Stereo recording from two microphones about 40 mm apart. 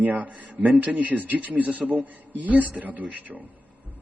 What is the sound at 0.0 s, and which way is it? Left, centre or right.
A man's voice, right.